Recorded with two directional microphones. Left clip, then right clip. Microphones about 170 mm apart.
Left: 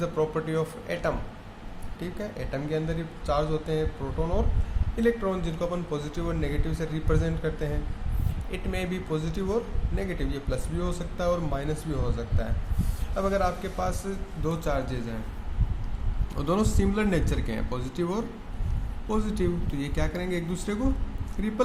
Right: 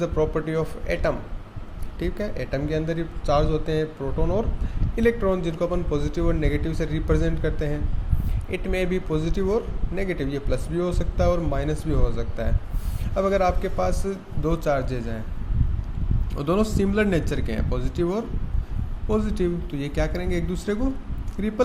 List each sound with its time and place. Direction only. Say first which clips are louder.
0.0 s speech: right 4 dB; 20° right (ahead or behind)
16.3 s speech: right 4 dB; 15° right (ahead or behind)